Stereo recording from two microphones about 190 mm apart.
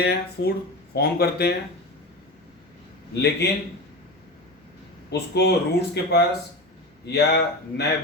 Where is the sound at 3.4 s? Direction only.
60° left (ahead or behind).